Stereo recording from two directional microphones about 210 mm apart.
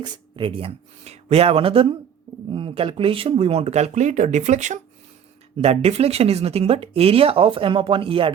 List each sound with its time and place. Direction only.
0.0 s speech: 25° right (ahead or behind)